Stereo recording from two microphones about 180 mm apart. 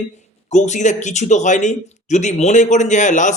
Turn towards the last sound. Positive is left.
turn(degrees=40)  # may be behind; listen again after turning